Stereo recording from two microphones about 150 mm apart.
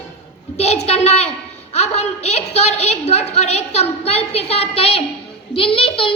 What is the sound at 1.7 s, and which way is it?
A woman's voice, 45° left (ahead or behind).